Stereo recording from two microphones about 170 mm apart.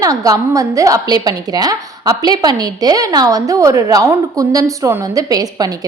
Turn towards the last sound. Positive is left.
turn(degrees=-20)  # may be behind; listen again after turning